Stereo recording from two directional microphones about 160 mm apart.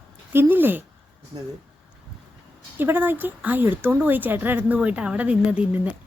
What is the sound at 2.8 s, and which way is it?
Speech, 15° right (ahead or behind).